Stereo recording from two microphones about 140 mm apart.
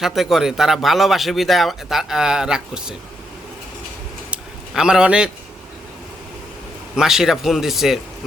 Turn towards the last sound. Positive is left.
turn(degrees=0)  # may be behind; listen again after turning